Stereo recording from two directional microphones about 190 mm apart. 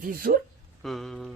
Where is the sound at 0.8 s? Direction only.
Centre (ahead or behind).